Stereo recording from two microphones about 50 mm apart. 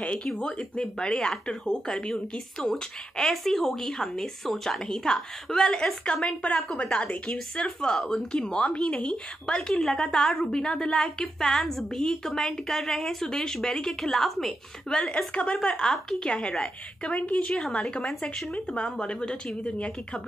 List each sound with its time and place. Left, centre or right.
0.0 s a woman's voice: left; by 14.5 s centre
14.9 s a woman's voice: centre
16.3 s speech: left
17.5 s a woman's voice: centre